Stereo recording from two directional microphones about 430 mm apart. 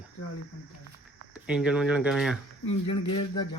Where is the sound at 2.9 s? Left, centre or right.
Left.